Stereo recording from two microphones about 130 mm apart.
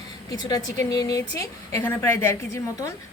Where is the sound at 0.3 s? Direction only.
30° left (ahead or behind).